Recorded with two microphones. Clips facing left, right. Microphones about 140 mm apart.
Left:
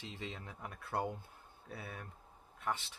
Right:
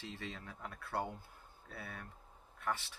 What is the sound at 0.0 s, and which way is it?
Speech, 15° left (ahead or behind).